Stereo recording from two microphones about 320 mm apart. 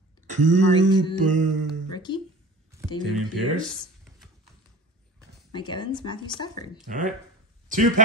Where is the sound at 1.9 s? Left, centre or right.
Centre.